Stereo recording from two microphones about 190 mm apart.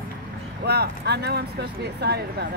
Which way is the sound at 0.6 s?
60° right (ahead or behind).